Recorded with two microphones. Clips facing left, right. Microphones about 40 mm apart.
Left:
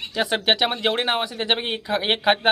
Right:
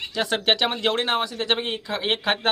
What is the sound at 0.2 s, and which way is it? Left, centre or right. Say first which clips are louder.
Speech: left 1 dB; centre.